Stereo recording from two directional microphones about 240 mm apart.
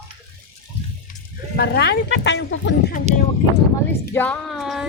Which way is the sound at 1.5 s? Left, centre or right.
Left.